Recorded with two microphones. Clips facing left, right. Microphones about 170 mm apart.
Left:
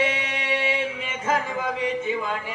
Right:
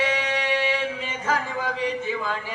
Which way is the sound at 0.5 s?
20° left (ahead or behind).